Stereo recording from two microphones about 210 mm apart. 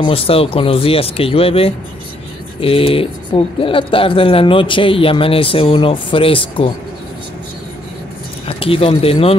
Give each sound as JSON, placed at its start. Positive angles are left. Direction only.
{"t": 0.0, "sound": "speech", "side_deg": 25}
{"t": 8.5, "sound": "speech", "side_deg": 25}